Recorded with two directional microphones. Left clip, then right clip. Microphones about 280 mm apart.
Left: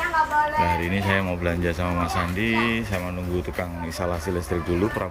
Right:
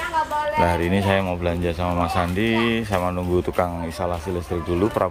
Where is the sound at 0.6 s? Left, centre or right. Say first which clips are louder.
Right 3 dB; centre.